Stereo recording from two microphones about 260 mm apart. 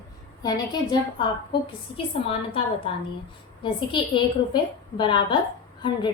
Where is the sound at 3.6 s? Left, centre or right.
Centre.